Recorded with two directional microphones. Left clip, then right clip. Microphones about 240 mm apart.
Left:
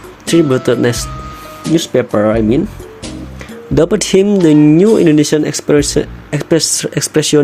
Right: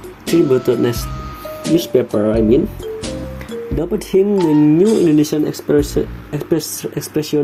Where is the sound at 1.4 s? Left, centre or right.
Centre.